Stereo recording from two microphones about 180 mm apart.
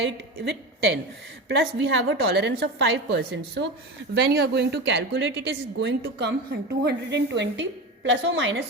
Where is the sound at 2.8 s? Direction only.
75° right (ahead or behind).